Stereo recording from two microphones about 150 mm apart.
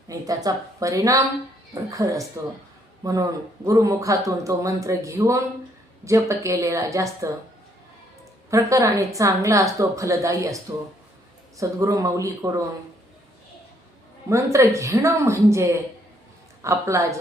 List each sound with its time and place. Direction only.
0.1 s a woman's voice: 25° right (ahead or behind)
8.4 s a woman's voice: 20° right (ahead or behind)
14.3 s a woman's voice: 20° right (ahead or behind)